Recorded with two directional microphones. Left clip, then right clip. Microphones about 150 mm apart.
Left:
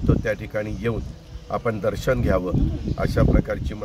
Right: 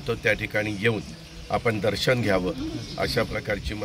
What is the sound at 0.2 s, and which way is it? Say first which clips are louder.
Speech: right 2 dB; 5° left (ahead or behind).